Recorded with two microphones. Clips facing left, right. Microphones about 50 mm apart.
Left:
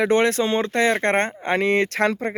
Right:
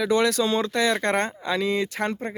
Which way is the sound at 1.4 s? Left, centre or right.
Left.